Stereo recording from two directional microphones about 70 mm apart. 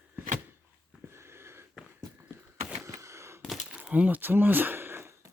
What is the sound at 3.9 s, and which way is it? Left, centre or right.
Speech, right.